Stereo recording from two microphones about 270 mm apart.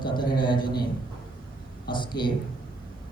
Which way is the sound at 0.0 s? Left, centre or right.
Centre.